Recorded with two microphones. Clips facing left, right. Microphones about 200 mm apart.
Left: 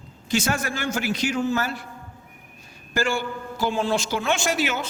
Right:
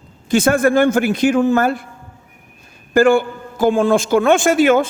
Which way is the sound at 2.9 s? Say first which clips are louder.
Right 13 dB; 55° right (ahead or behind).